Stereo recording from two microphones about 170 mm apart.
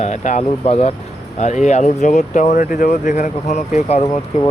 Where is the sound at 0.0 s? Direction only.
45° left (ahead or behind).